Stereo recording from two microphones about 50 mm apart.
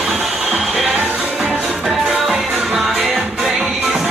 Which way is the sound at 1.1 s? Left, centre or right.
Centre.